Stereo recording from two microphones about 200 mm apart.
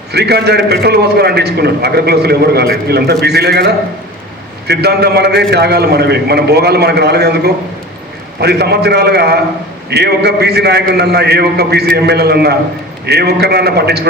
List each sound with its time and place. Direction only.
0.1 s a man's voice: 55° right (ahead or behind)